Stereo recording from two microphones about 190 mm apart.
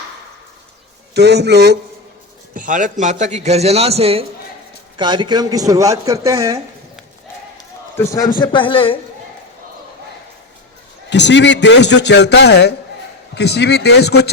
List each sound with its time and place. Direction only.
1.1 s a man's voice: 60° right (ahead or behind)
2.6 s a man's voice: 45° right (ahead or behind); by 6.6 s 15° right (ahead or behind)
7.9 s a man's voice: 15° left (ahead or behind)
8.4 s speech: 25° left (ahead or behind)
11.1 s a man's voice: 65° left (ahead or behind)